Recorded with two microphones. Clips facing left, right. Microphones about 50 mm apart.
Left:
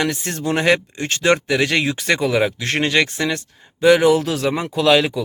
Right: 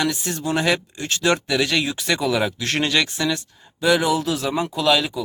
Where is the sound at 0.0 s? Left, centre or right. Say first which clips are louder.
Left 2 dB; left.